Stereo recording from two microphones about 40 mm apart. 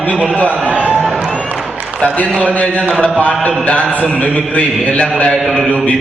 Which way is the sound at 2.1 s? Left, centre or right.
Left.